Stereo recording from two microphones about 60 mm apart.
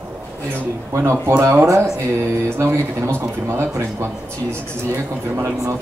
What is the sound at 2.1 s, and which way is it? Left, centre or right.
A man's voice, right.